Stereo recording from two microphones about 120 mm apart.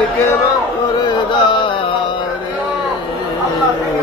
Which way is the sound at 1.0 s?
40° left (ahead or behind).